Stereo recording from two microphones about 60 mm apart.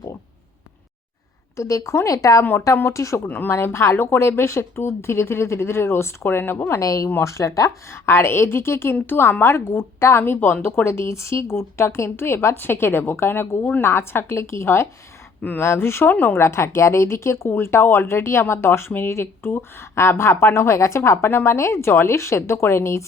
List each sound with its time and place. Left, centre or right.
1.5 s speech: left
2.4 s speech: left
2.9 s speech: left
3.2 s speech: left
6.7 s speech: left
7.2 s speech: left
7.9 s speech: left
16.1 s speech: left
16.4 s speech: left